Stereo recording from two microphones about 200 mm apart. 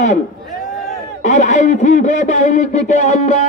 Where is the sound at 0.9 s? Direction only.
35° left (ahead or behind).